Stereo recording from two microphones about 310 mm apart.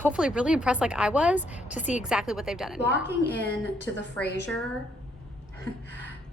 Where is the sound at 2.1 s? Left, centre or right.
Centre.